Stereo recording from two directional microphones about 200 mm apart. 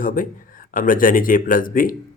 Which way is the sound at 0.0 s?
45° left (ahead or behind).